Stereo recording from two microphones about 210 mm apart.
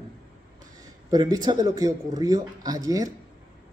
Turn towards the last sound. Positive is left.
turn(degrees=-15)  # may be behind; listen again after turning